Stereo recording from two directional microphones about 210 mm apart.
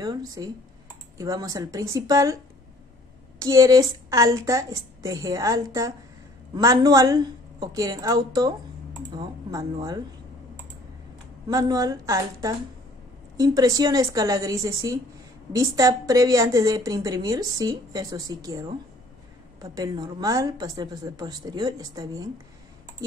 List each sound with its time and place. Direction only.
0.0 s a woman's voice: 20° right (ahead or behind)
3.3 s a woman's voice: 15° right (ahead or behind)
11.4 s a woman's voice: 20° right (ahead or behind)